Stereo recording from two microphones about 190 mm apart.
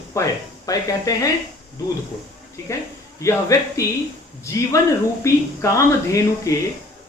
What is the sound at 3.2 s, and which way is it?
Speech, 15° left (ahead or behind).